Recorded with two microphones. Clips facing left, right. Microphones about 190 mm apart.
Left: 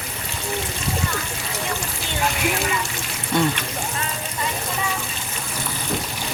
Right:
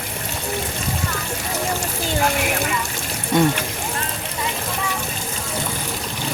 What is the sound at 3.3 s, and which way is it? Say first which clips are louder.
Speech: right 3 dB; 20° right (ahead or behind).